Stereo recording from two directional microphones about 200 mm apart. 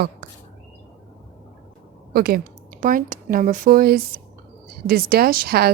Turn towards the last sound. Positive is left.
turn(degrees=-50)  # may be behind; listen again after turning